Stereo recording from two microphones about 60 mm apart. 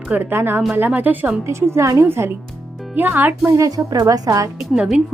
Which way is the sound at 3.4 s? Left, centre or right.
Right.